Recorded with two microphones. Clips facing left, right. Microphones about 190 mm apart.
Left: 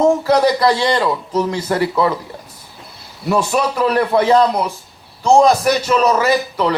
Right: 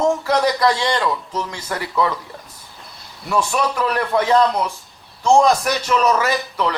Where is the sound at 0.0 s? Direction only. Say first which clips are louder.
Left 5 dB; 30° left (ahead or behind).